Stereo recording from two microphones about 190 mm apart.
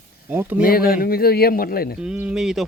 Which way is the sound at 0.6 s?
50° left (ahead or behind).